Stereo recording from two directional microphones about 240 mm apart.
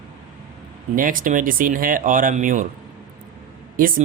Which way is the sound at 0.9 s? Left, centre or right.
Right.